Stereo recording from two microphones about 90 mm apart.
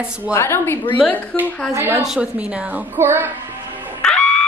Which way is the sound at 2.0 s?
10° right (ahead or behind).